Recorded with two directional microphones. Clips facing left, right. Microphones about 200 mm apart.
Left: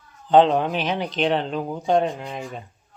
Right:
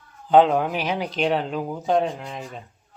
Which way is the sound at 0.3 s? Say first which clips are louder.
Even; 5° right (ahead or behind).